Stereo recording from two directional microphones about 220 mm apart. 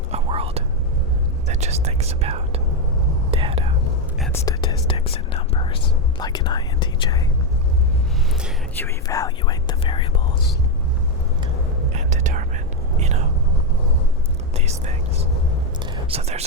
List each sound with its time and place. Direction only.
0.1 s whispering: 25° right (ahead or behind)
1.5 s speech: 30° right (ahead or behind)
3.3 s whispering: 25° right (ahead or behind)
4.4 s whispering: 20° left (ahead or behind)
8.8 s speech: 15° left (ahead or behind)
11.9 s whispering: 35° right (ahead or behind)
14.5 s speech: 30° right (ahead or behind)
15.8 s whispering: 30° right (ahead or behind)